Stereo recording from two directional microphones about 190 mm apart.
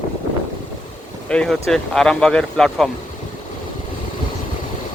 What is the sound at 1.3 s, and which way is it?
Speech, 5° left (ahead or behind).